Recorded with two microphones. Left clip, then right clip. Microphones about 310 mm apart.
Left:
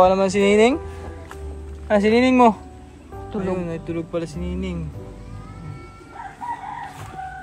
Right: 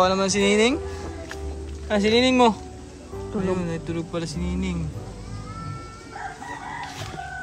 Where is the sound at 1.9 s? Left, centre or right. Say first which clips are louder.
Left 3 dB; centre.